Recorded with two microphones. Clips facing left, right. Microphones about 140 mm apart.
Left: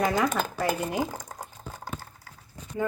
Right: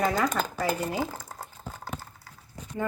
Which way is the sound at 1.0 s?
15° left (ahead or behind).